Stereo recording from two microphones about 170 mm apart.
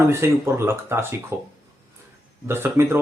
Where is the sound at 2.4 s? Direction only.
15° right (ahead or behind).